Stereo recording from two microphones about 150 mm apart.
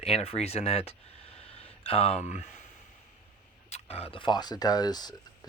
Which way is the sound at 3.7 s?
45° left (ahead or behind).